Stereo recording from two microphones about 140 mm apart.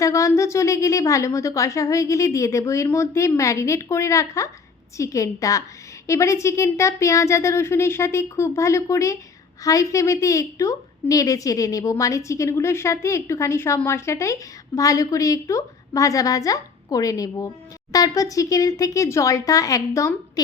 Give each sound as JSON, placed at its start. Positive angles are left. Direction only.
{"t": 0.0, "sound": "a woman's voice", "side_deg": 20}